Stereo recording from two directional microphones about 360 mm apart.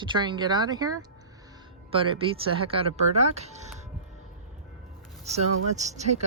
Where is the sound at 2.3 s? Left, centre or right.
Centre.